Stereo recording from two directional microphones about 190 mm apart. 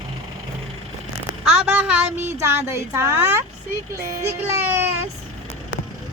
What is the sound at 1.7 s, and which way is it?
Speech, 10° right (ahead or behind).